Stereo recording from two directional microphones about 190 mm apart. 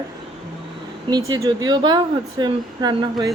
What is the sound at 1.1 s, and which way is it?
Speech, 20° right (ahead or behind).